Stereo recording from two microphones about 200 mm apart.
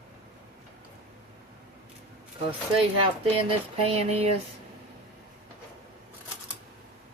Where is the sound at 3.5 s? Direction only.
30° right (ahead or behind).